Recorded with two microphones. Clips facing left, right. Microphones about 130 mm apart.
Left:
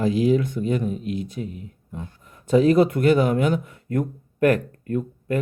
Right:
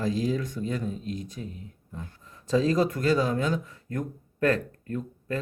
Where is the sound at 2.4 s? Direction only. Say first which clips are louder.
Left 7 dB; 65° left (ahead or behind).